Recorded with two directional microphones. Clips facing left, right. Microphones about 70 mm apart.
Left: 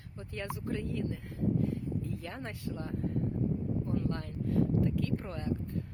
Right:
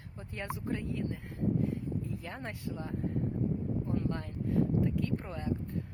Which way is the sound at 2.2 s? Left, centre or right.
Centre.